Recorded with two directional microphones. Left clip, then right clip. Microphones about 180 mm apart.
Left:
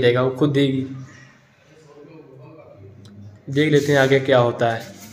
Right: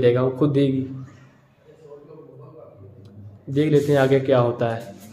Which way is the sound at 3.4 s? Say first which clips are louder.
Left 1 dB; centre (ahead or behind).